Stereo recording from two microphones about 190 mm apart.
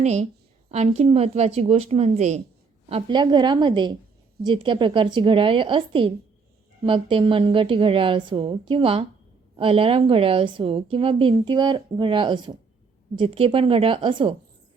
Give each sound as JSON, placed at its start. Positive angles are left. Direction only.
{"t": 0.0, "sound": "a woman's voice", "side_deg": -35}
{"t": 2.9, "sound": "a woman's voice", "side_deg": -25}